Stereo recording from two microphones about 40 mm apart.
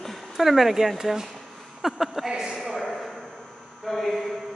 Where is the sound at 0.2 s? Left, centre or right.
Centre.